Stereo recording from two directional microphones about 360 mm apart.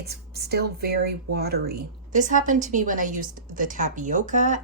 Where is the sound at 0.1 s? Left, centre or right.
Right.